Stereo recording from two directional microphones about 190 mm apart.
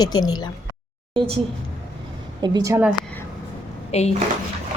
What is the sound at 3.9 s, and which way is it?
Speech, 35° left (ahead or behind).